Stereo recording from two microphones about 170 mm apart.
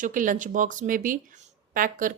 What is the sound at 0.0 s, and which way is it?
A woman's voice, 50° right (ahead or behind).